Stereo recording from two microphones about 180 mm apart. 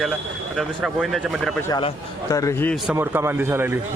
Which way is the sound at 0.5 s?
5° right (ahead or behind).